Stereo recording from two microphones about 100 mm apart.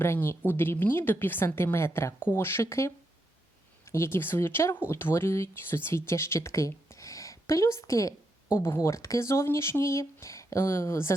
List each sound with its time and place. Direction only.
0.0 s speech: 20° left (ahead or behind)